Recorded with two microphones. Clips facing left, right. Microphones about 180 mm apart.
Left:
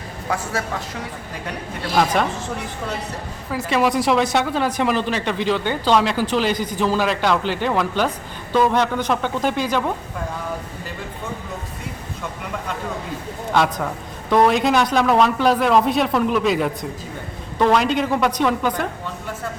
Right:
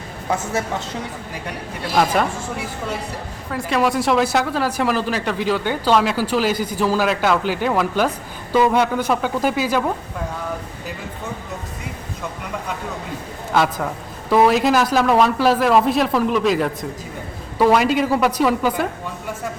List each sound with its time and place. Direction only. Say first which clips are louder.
0.3 s a man's voice: right 2 dB; 20° right (ahead or behind)
2.0 s a man's voice: right 1 dB; 5° right (ahead or behind)
13.5 s speech: even; 5° right (ahead or behind)